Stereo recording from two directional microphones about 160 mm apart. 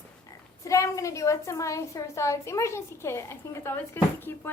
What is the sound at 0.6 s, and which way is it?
A woman's voice, 20° left (ahead or behind).